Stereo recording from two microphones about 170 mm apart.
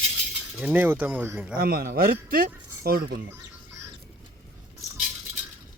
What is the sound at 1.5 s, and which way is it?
Speech, 60° right (ahead or behind).